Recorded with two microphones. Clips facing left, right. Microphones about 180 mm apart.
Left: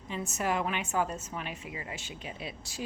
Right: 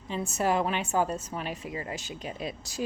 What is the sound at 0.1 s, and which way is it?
A woman's voice, 30° right (ahead or behind).